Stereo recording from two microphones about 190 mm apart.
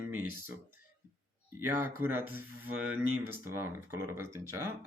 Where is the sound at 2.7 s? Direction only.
90° right.